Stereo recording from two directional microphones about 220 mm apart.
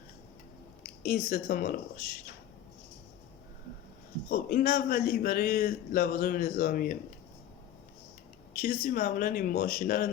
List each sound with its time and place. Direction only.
0.9 s a man's voice: 40° left (ahead or behind)
4.3 s a man's voice: 40° left (ahead or behind)
8.5 s a man's voice: 40° left (ahead or behind)